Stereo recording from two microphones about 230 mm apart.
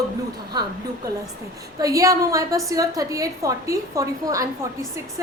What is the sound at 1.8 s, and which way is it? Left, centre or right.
A woman's voice, centre.